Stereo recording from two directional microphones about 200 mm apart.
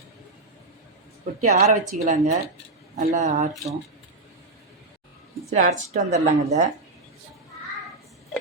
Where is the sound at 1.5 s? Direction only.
35° right (ahead or behind).